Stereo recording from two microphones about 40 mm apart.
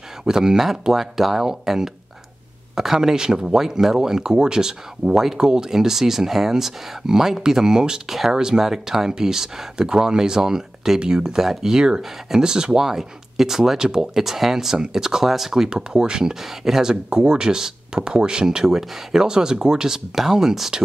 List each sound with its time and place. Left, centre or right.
0.2 s speech: centre
8.1 s speech: centre
15.7 s speech: centre
16.9 s speech: right; by 20.7 s centre